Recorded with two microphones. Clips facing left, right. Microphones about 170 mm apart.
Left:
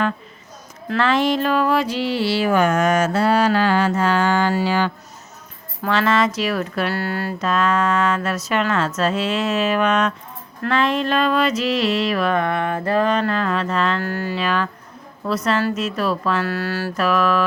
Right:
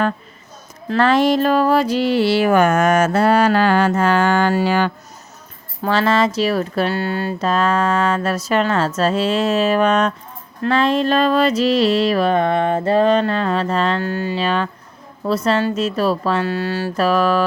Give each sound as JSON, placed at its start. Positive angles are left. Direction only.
{"t": 0.9, "sound": "music", "side_deg": -40}
{"t": 5.8, "sound": "speech", "side_deg": -30}